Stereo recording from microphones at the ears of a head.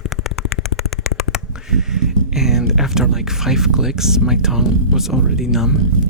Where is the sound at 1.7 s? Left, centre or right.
Right.